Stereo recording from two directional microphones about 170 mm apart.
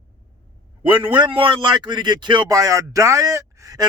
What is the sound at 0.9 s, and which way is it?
A man's voice, 30° right (ahead or behind).